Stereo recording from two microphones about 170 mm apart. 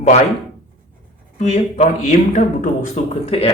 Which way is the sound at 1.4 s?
40° left (ahead or behind).